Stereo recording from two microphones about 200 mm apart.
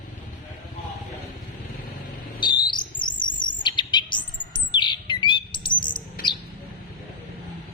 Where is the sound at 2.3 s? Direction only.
20° left (ahead or behind).